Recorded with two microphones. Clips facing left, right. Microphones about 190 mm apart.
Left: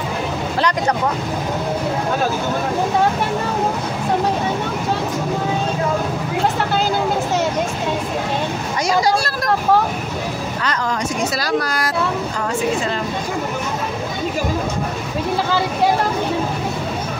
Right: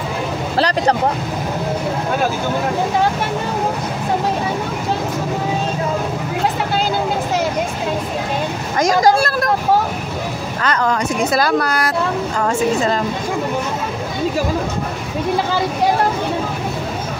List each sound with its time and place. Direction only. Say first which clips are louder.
0.6 s speech: right 3 dB; 35° right (ahead or behind)
8.7 s vehicle: right 4 dB; 50° right (ahead or behind)
10.6 s speech: right 5 dB; 60° right (ahead or behind)